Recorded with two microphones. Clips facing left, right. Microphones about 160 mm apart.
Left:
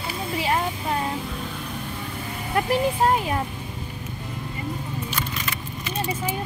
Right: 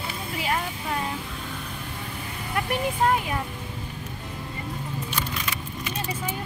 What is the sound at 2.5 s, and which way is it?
Speech, 35° left (ahead or behind).